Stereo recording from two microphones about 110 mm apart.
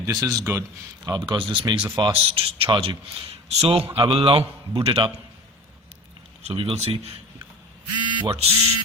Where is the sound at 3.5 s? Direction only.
65° right (ahead or behind).